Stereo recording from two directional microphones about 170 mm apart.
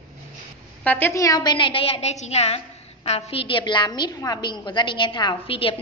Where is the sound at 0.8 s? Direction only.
10° left (ahead or behind).